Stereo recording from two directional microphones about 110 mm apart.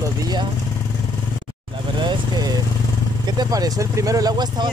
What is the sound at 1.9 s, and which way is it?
Vehicle, 40° right (ahead or behind).